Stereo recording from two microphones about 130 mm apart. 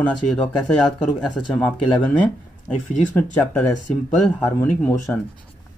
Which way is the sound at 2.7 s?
75° left (ahead or behind).